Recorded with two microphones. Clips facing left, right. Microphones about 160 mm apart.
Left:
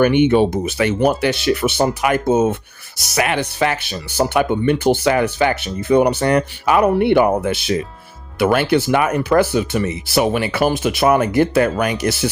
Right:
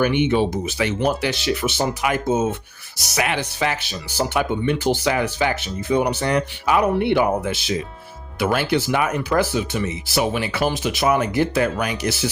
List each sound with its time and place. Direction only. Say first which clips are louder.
0.0 s speech: left 5 dB; 55° left (ahead or behind)